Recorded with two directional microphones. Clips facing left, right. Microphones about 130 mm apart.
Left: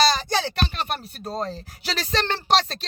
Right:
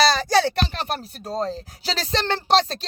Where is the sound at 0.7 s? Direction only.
35° right (ahead or behind).